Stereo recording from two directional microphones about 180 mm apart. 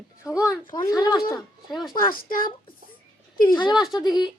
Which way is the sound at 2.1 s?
50° left (ahead or behind).